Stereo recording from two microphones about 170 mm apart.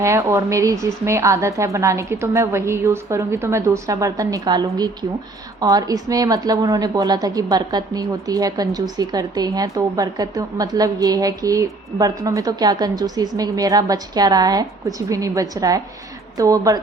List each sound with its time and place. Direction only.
0.0 s a woman's voice: 15° right (ahead or behind)